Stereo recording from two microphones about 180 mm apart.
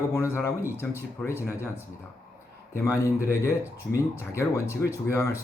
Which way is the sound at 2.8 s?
15° left (ahead or behind).